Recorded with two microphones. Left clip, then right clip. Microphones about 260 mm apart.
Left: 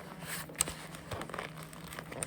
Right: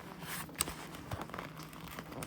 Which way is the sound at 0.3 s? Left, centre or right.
Right.